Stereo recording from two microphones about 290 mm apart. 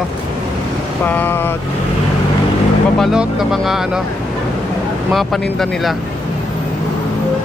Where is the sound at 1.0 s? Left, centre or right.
Centre.